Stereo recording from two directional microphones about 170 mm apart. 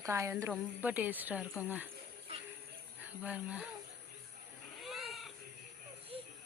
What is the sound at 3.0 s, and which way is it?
Speech, 10° right (ahead or behind).